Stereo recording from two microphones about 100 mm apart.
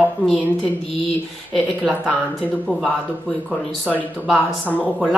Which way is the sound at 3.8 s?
15° right (ahead or behind).